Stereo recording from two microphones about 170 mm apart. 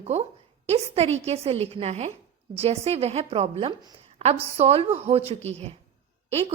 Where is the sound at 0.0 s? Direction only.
40° right (ahead or behind).